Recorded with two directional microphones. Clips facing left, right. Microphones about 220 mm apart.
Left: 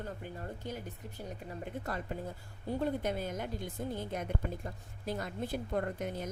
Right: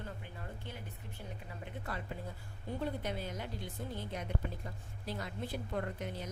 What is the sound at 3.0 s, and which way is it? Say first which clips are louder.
Speech: left 4 dB; 50° left (ahead or behind).